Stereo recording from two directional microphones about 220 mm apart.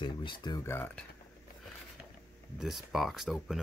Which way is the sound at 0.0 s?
20° left (ahead or behind).